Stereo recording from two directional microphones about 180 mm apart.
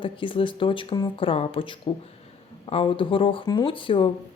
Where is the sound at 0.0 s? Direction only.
30° left (ahead or behind).